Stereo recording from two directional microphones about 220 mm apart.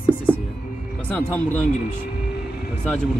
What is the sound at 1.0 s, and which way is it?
Speech, 10° left (ahead or behind).